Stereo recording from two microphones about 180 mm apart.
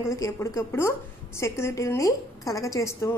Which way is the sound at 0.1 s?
15° left (ahead or behind).